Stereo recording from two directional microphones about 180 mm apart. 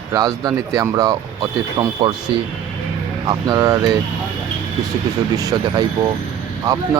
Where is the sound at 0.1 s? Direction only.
20° right (ahead or behind).